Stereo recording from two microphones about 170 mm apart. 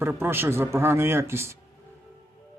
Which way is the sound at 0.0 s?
15° right (ahead or behind).